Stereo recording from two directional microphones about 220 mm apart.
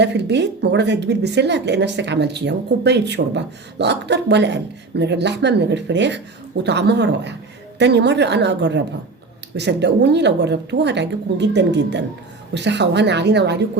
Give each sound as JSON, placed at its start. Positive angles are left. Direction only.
{"t": 0.0, "sound": "speech", "side_deg": -50}